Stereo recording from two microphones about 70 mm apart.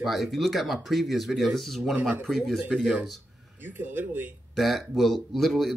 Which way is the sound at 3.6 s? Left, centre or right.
Right.